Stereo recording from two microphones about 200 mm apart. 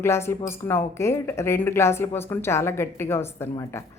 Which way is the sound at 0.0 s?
10° left (ahead or behind).